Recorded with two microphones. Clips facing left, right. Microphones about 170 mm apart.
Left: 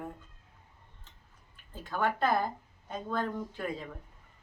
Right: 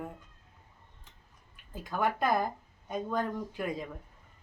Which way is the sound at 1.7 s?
10° right (ahead or behind).